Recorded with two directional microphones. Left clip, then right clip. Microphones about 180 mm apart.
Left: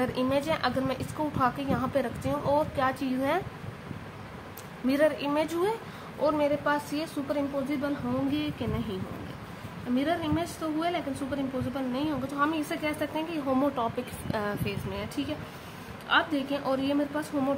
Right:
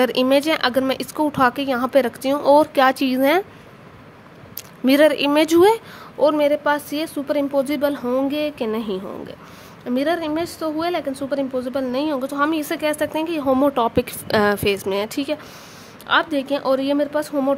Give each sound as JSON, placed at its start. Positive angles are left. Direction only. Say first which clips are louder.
{"t": 0.0, "sound": "a woman's voice", "louder": "right 11 dB", "side_deg": -60}
{"t": 4.8, "sound": "a woman's voice", "louder": "right 11 dB", "side_deg": -65}
{"t": 9.9, "sound": "a woman's voice", "louder": "right 8 dB", "side_deg": -70}